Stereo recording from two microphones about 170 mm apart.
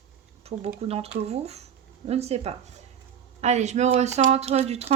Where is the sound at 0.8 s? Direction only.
35° right (ahead or behind).